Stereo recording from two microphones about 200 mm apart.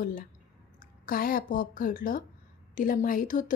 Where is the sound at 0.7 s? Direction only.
45° left (ahead or behind).